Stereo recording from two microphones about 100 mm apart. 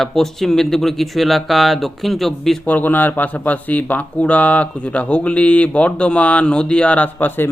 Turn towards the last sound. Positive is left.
turn(degrees=15)  # may be behind; listen again after turning